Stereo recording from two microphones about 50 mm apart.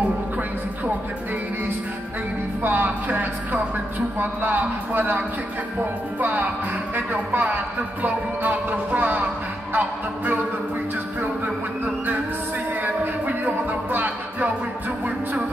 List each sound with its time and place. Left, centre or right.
2.6 s a man's voice: right
13.7 s music: right